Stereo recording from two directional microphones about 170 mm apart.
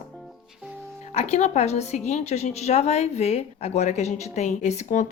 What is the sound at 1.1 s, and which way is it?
A woman's voice, 40° left (ahead or behind).